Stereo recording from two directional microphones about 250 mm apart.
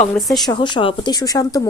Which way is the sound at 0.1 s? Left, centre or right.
Centre.